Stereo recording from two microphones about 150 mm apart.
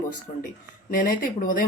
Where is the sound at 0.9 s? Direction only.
70° left (ahead or behind).